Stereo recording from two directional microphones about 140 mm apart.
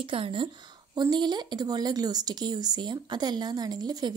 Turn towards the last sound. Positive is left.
turn(degrees=-30)  # may be behind; listen again after turning